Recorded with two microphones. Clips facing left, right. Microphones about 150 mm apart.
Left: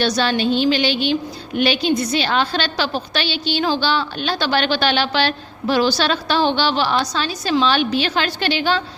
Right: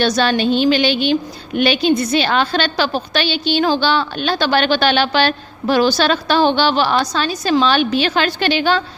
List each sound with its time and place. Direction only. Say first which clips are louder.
0.0 s a woman's voice: right 3 dB; 55° right (ahead or behind)